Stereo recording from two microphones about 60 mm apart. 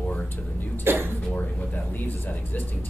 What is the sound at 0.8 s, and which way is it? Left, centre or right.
Speech, right.